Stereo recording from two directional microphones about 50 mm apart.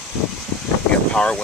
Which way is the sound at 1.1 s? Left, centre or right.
Centre.